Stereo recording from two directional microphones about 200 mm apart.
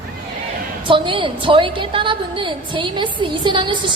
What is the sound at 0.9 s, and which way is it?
A woman's voice, 25° right (ahead or behind).